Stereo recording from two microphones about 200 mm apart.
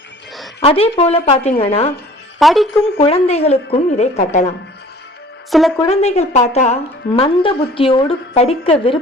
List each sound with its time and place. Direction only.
0.6 s a woman's voice: 30° left (ahead or behind)
2.4 s a woman's voice: centre (ahead or behind)
3.0 s speech: 30° left (ahead or behind)
5.5 s a woman's voice: centre (ahead or behind)
5.9 s speech: 30° left (ahead or behind)